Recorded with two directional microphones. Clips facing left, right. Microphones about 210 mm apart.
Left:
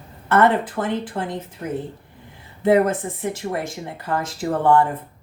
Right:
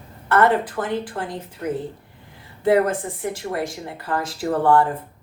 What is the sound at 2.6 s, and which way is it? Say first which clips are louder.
Speech: left 1 dB; 25° left (ahead or behind).